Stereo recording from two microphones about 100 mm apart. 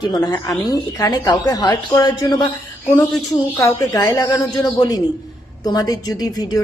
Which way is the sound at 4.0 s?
40° left (ahead or behind).